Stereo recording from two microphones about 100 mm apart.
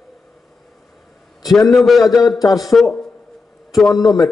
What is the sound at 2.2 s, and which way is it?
Speech, 40° left (ahead or behind).